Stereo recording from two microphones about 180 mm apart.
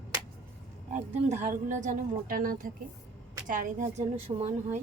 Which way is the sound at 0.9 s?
40° right (ahead or behind).